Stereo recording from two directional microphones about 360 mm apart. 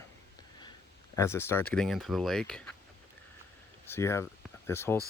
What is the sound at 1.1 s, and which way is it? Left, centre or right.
Speech, centre.